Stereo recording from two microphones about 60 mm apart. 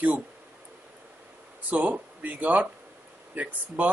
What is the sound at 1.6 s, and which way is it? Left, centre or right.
Speech, right.